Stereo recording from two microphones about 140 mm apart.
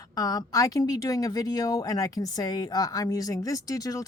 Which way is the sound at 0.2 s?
25° left (ahead or behind).